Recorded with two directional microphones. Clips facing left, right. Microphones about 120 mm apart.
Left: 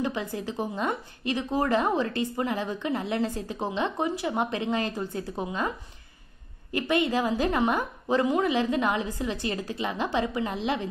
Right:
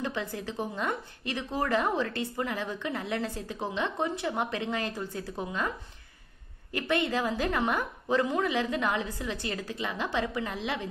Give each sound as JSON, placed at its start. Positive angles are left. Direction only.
{"t": 0.0, "sound": "a woman's voice", "side_deg": 15}
{"t": 6.7, "sound": "a woman's voice", "side_deg": 15}